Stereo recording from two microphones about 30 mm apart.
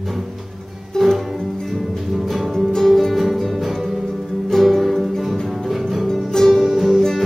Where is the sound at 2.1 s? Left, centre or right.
Centre.